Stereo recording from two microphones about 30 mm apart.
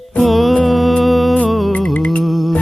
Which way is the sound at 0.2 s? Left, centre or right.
Centre.